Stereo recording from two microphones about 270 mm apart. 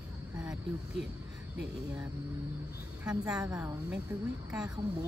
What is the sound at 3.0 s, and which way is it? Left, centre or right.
Speech, centre.